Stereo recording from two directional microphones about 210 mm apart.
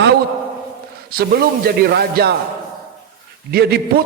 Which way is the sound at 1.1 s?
45° right (ahead or behind).